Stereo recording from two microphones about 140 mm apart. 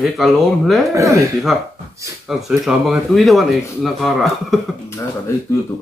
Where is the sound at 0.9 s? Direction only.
20° right (ahead or behind).